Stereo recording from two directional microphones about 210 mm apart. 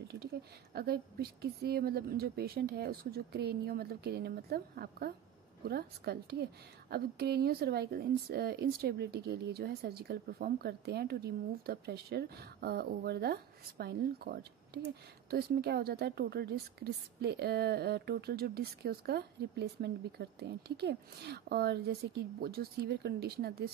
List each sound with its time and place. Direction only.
0.7 s speech: 45° right (ahead or behind)